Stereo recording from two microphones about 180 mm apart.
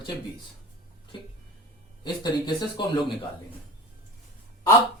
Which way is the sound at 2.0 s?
25° left (ahead or behind).